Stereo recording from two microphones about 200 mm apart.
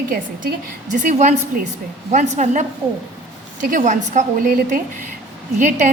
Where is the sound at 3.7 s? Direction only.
40° right (ahead or behind).